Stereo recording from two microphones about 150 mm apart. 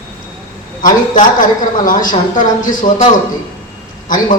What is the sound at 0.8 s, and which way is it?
A woman's voice, 60° left (ahead or behind).